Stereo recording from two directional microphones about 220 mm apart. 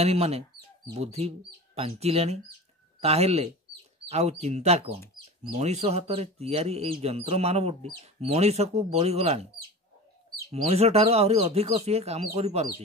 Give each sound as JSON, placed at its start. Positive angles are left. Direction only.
{"t": 0.0, "sound": "speech", "side_deg": -30}
{"t": 10.5, "sound": "speech", "side_deg": -30}